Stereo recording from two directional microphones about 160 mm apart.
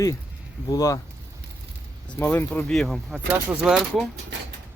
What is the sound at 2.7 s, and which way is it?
Speech, centre (ahead or behind).